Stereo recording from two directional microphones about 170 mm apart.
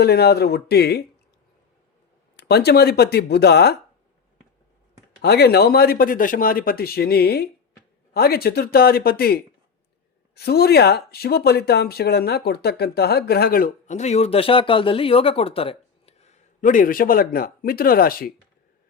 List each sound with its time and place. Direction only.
0.0 s speech: 70° left (ahead or behind)
2.5 s speech: 70° left (ahead or behind)
5.2 s speech: 70° left (ahead or behind)